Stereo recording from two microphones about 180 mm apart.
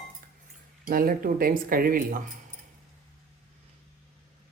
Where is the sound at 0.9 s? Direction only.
55° right (ahead or behind).